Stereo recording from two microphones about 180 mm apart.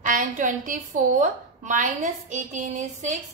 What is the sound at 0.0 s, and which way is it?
A woman's voice, 45° right (ahead or behind).